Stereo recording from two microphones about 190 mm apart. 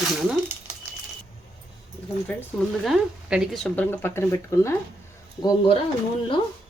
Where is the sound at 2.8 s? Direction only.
5° right (ahead or behind); by 5.7 s 20° left (ahead or behind).